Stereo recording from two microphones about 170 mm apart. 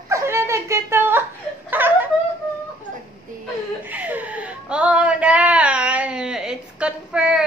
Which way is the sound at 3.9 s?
10° right (ahead or behind).